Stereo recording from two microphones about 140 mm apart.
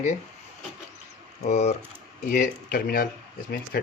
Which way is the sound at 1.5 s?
50° left (ahead or behind).